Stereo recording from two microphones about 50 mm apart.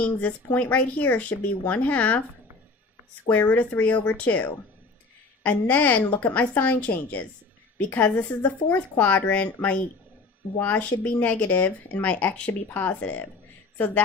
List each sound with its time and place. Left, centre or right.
0.0 s speech: left
3.2 s speech: left